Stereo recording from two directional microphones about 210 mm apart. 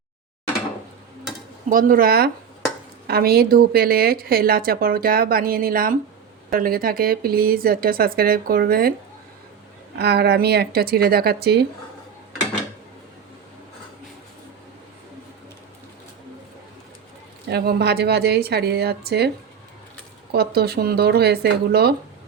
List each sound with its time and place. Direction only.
1.7 s a woman's voice: 40° right (ahead or behind)
10.0 s a woman's voice: 50° right (ahead or behind)
17.5 s a woman's voice: 50° right (ahead or behind)
20.3 s a woman's voice: 50° right (ahead or behind)